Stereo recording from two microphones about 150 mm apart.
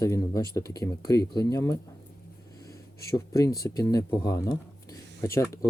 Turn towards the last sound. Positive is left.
turn(degrees=20)  # may be behind; listen again after turning